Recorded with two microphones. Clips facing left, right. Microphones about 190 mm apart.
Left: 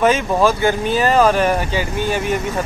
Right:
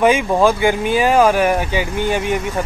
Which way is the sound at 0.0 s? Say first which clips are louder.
Right 1 dB; 15° right (ahead or behind).